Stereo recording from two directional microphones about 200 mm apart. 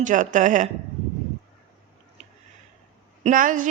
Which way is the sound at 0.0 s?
40° right (ahead or behind).